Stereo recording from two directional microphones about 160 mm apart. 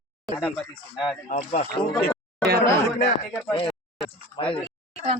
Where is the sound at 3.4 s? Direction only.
30° left (ahead or behind).